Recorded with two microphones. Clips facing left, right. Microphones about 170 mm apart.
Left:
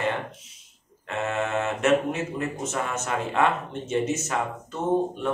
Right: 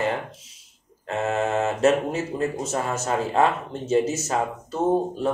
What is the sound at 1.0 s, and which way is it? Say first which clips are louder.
Speech: right 3 dB; 35° right (ahead or behind).